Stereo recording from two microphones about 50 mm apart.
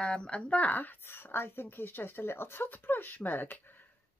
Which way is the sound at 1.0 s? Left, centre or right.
Left.